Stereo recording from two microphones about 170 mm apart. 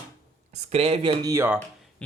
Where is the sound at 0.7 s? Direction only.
35° right (ahead or behind).